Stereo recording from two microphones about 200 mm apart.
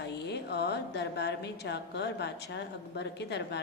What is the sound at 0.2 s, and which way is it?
Speech, 60° left (ahead or behind).